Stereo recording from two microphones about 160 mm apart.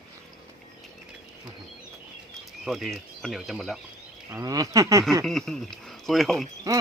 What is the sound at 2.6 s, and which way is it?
Speech, centre (ahead or behind).